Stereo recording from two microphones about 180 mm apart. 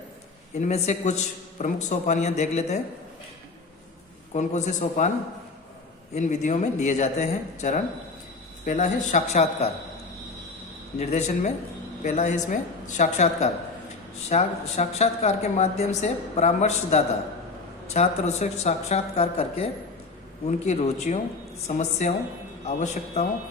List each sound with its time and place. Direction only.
0.6 s a woman's voice: 40° left (ahead or behind)
4.4 s a woman's voice: 40° left (ahead or behind)
6.1 s a woman's voice: 40° left (ahead or behind)
10.9 s a woman's voice: 40° left (ahead or behind)